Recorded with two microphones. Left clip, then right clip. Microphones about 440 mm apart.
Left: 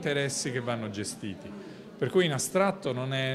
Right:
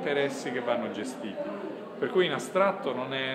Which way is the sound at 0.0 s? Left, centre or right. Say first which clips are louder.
Right 2 dB; left.